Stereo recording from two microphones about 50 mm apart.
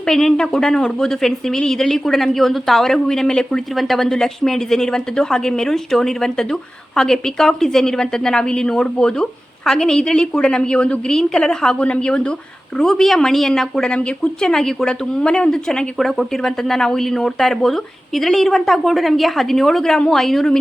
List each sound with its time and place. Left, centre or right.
0.0 s speech: centre
12.8 s speech: centre